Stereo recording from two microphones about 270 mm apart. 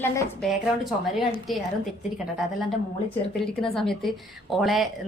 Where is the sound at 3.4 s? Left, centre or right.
Centre.